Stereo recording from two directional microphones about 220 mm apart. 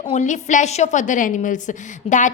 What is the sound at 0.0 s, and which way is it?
A woman's voice, 30° left (ahead or behind).